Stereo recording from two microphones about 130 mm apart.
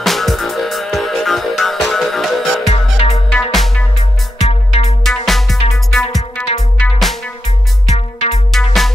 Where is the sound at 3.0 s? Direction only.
50° left (ahead or behind).